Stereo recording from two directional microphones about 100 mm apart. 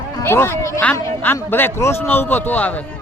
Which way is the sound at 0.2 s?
25° left (ahead or behind).